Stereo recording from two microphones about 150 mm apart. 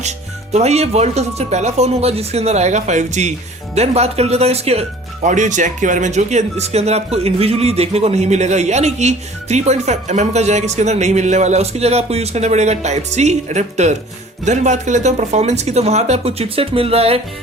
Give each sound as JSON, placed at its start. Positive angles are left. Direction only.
{"t": 0.5, "sound": "speech", "side_deg": -45}